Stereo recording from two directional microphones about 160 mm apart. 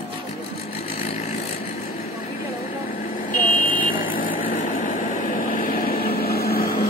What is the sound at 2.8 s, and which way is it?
Vehicle, 55° left (ahead or behind).